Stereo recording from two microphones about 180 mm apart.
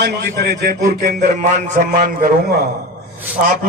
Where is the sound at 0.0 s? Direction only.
60° right (ahead or behind).